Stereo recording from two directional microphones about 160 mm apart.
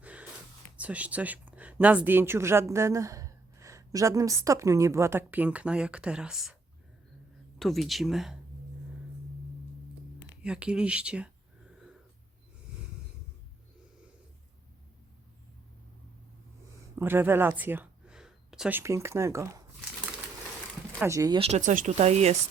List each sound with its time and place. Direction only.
0.0 s gasp: 10° right (ahead or behind)
0.8 s speech: 10° right (ahead or behind)
7.6 s speech: centre (ahead or behind)
10.4 s speech: 5° right (ahead or behind)
16.9 s speech: 15° right (ahead or behind)
17.6 s a sound: 10° right (ahead or behind)
18.8 s speech: 15° right (ahead or behind)
21.0 s speech: 20° right (ahead or behind)
21.3 s speech: 35° right (ahead or behind)
21.6 s speech: 55° right (ahead or behind)